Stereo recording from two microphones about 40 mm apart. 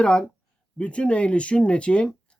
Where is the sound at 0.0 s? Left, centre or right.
Left.